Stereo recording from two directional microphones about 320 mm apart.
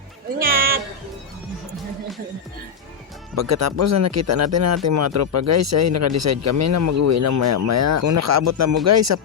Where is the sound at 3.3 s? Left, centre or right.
Right.